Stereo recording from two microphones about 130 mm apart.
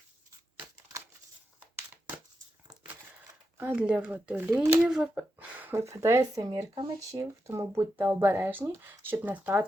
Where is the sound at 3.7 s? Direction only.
10° right (ahead or behind).